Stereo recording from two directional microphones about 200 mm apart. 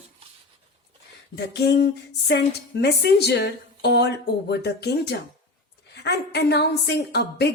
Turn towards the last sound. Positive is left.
turn(degrees=55)  # may be behind; listen again after turning